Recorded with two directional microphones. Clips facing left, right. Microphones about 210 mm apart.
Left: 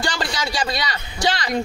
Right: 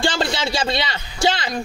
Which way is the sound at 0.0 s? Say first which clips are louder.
Right 4 dB; 25° right (ahead or behind).